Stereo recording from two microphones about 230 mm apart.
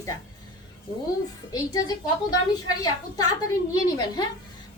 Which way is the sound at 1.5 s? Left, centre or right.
Centre.